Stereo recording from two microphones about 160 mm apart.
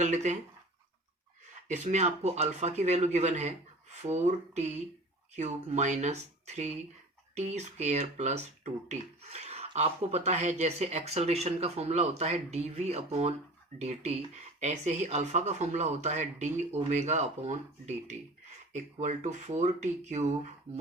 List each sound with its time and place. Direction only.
0.0 s speech: 45° right (ahead or behind)
1.6 s speech: 45° right (ahead or behind)
5.7 s speech: 50° right (ahead or behind)